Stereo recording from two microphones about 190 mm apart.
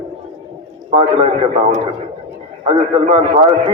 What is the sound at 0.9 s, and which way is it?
A man's voice, 30° right (ahead or behind).